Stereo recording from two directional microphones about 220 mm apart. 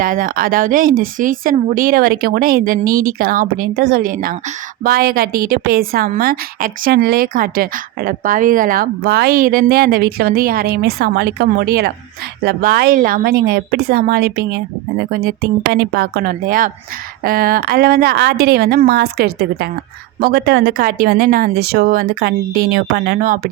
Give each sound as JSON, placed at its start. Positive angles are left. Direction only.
{"t": 0.0, "sound": "a woman's voice", "side_deg": -40}